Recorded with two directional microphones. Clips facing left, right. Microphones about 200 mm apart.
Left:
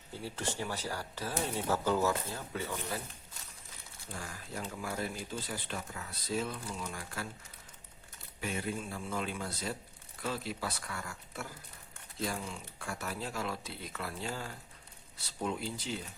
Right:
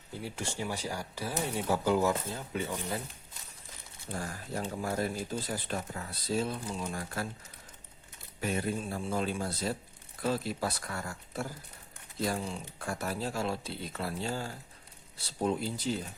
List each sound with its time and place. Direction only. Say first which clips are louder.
0.1 s speech: even; 15° right (ahead or behind)
4.1 s speech: right 6 dB; 40° right (ahead or behind)
8.4 s speech: right 4 dB; 40° right (ahead or behind)